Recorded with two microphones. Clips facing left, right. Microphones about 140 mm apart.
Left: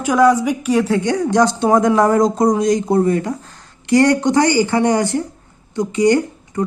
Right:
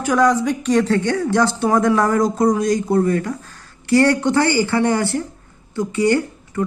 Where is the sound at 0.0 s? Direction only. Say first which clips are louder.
Left 3 dB; 10° left (ahead or behind).